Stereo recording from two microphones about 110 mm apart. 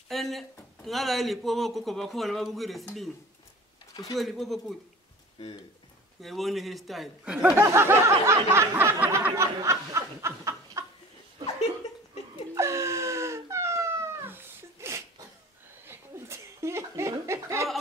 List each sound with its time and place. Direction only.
0.1 s speech: centre (ahead or behind)
4.2 s speech: centre (ahead or behind)
6.2 s speech: centre (ahead or behind)
7.5 s a sound: 20° right (ahead or behind)
9.3 s snicker: 30° right (ahead or behind)
12.5 s cat: 25° right (ahead or behind)
15.8 s chuckle: 25° right (ahead or behind)